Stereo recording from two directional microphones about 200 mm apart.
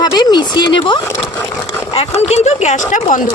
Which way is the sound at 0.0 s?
20° left (ahead or behind).